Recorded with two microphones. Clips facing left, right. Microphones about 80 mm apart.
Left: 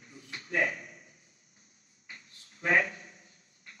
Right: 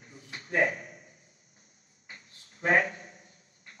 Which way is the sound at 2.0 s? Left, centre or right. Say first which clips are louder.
Right 1 dB; right.